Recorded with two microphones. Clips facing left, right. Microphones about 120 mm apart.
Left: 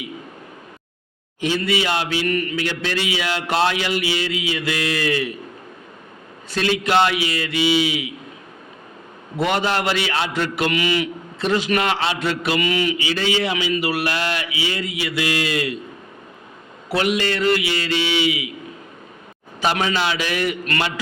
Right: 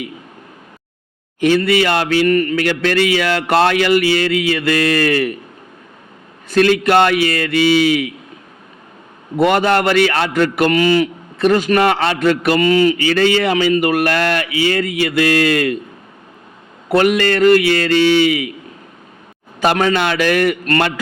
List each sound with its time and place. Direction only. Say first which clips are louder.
1.4 s a man's voice: right 8 dB; 60° right (ahead or behind)
6.5 s a man's voice: right 7 dB; 55° right (ahead or behind)
9.4 s a man's voice: right 7 dB; 55° right (ahead or behind)
16.9 s a man's voice: right 7 dB; 55° right (ahead or behind)
19.5 s a man's voice: right 6 dB; 50° right (ahead or behind)